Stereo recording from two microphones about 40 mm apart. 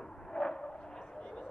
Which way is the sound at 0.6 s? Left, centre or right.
Left.